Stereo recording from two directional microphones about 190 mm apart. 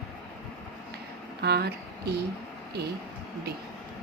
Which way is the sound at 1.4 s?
60° right (ahead or behind).